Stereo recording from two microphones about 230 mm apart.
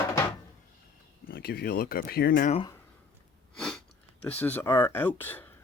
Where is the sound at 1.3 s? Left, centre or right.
Left.